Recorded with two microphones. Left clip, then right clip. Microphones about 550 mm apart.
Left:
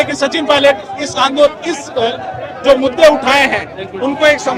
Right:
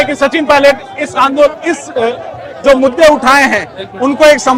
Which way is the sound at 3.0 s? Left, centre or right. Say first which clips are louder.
Right 2 dB; right.